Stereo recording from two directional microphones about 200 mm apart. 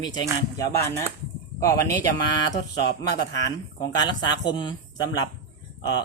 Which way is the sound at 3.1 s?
20° left (ahead or behind).